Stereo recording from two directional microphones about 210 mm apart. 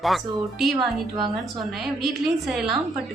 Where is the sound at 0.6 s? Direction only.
Centre (ahead or behind).